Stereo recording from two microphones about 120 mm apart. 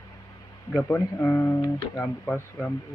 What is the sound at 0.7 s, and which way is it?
Speech, 20° left (ahead or behind).